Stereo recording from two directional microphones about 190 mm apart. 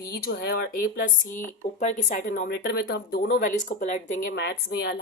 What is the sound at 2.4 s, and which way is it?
Speech, 60° left (ahead or behind).